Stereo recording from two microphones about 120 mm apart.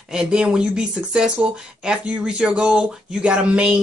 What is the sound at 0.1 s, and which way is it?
Speech, 10° right (ahead or behind).